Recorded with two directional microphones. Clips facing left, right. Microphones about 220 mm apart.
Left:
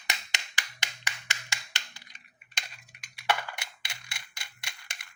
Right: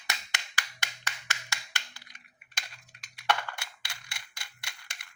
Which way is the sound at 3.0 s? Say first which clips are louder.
Even; 5° left (ahead or behind).